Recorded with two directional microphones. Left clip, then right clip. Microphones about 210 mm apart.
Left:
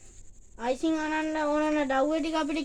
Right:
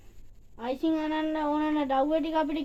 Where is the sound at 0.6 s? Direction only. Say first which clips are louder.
Left 1 dB; 20° right (ahead or behind).